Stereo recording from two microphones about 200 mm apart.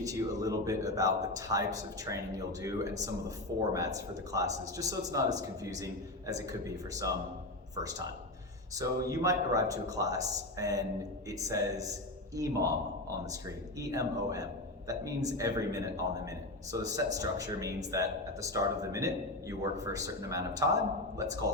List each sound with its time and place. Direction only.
0.0 s speech: 15° right (ahead or behind)
16.9 s speech: 15° right (ahead or behind)